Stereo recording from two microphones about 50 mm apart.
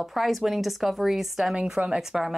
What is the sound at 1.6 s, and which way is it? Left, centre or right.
Speech, centre.